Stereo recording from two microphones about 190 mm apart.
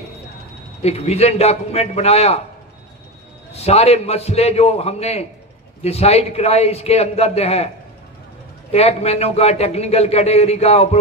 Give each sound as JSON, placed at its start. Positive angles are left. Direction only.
{"t": 0.8, "sound": "a man's voice", "side_deg": 35}
{"t": 3.5, "sound": "a man's voice", "side_deg": 35}
{"t": 8.7, "sound": "a man's voice", "side_deg": 30}